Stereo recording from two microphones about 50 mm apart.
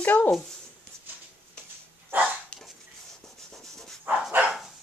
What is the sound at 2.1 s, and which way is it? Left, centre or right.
Dog, right.